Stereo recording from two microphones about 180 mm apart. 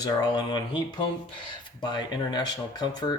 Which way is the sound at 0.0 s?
25° left (ahead or behind).